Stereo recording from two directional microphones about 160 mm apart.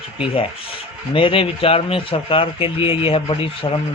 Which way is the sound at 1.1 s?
35° left (ahead or behind).